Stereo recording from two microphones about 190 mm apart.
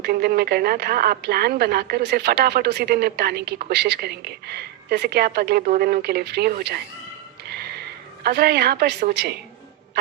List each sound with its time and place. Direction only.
0.0 s a woman's voice: 55° right (ahead or behind)
8.2 s a woman's voice: 55° right (ahead or behind)